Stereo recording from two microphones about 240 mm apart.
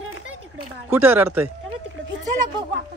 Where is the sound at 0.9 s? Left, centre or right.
Centre.